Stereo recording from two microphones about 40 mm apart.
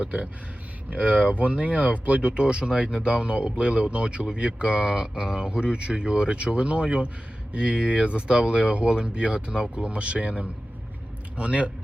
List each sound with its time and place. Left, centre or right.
0.9 s speech: right